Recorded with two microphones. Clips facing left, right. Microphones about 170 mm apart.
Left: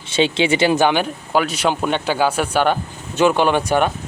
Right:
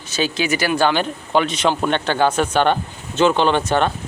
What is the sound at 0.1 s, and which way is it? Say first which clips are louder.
Speech: left 4 dB; 25° left (ahead or behind).